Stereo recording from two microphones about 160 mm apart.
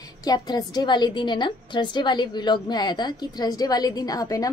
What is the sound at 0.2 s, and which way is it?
Speech, 25° left (ahead or behind).